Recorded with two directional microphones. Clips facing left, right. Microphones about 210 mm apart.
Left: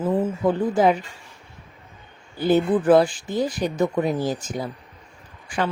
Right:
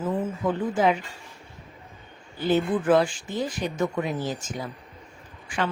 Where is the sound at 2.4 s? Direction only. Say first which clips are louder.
Left 4 dB; 40° left (ahead or behind).